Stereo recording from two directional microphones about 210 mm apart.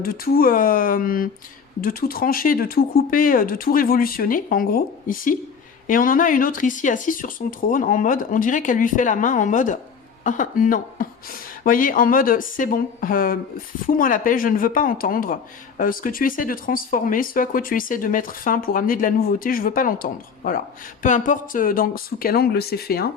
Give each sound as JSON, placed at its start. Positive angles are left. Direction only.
{"t": 0.0, "sound": "speech", "side_deg": 45}